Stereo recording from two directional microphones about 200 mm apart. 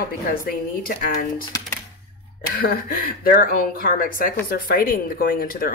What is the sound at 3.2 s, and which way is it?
Speech, 45° left (ahead or behind).